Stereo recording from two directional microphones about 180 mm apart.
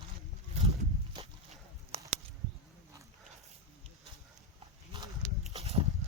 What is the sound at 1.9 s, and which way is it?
Bird, 35° right (ahead or behind).